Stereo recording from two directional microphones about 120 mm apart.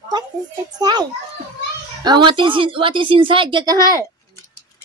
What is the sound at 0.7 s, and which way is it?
Speech, 35° right (ahead or behind).